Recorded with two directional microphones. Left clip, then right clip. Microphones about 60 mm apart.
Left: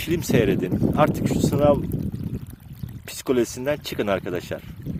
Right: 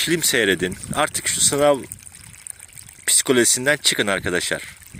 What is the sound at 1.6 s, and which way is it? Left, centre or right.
Speech, right.